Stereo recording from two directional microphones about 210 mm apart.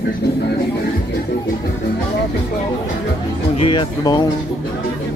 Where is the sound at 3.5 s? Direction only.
25° left (ahead or behind).